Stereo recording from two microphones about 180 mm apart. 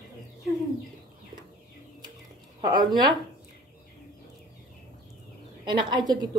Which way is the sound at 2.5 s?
25° right (ahead or behind).